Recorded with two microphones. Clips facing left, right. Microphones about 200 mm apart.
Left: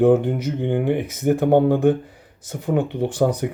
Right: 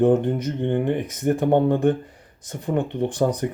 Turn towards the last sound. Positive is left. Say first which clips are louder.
# left 2 dB
turn(degrees=5)  # may be behind; listen again after turning